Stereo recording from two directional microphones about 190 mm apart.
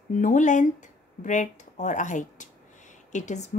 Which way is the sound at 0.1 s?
40° left (ahead or behind).